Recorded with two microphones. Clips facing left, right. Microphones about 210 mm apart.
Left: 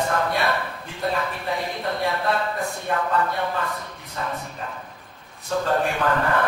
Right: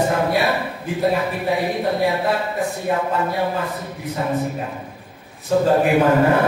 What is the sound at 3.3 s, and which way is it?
Speech, 10° right (ahead or behind).